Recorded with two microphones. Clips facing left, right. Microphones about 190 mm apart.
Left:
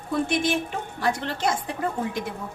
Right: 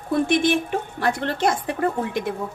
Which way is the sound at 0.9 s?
55° right (ahead or behind).